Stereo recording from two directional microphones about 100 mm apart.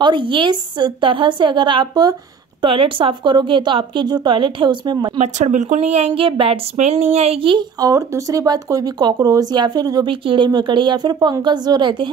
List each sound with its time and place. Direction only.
0.0 s a woman's voice: 55° right (ahead or behind)
2.6 s speech: 60° right (ahead or behind)
5.8 s speech: 90° right; by 7.6 s 65° right (ahead or behind)
7.8 s speech: 35° right (ahead or behind)
10.0 s a woman's voice: 55° right (ahead or behind)